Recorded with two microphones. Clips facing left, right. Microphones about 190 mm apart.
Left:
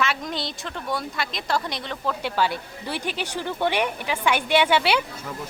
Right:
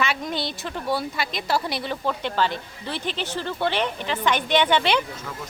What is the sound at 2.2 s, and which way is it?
Speech, 10° left (ahead or behind).